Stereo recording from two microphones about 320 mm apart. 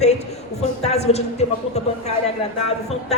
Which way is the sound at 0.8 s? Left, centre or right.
Centre.